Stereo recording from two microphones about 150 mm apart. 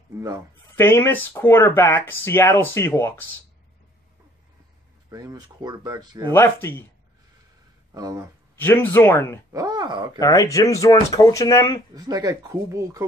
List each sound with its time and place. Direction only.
0.7 s speech: 15° left (ahead or behind)
5.1 s speech: 25° right (ahead or behind)
6.3 s speech: 15° left (ahead or behind)
7.9 s speech: 25° right (ahead or behind)
8.5 s speech: 15° left (ahead or behind)
9.5 s speech: 25° right (ahead or behind)
10.1 s speech: 25° left (ahead or behind)
11.9 s speech: 25° right (ahead or behind)